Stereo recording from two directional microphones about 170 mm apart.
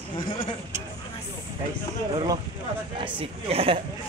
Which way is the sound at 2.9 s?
35° right (ahead or behind).